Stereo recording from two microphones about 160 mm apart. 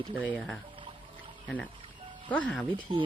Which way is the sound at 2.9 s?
30° right (ahead or behind).